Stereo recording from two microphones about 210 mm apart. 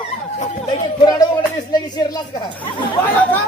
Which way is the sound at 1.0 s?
20° left (ahead or behind).